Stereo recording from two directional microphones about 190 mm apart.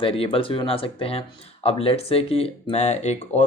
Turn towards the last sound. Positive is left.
turn(degrees=35)  # may be behind; listen again after turning